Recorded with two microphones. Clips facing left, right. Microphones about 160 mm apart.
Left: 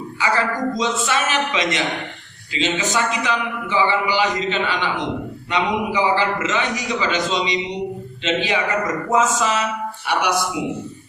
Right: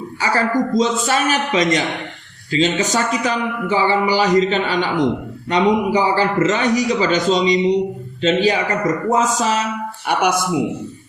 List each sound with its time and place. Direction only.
0.2 s a man's voice: 40° right (ahead or behind)
10.1 s speech: 50° right (ahead or behind)